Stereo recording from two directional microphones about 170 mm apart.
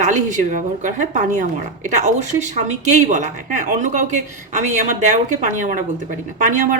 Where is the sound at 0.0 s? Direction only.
45° right (ahead or behind).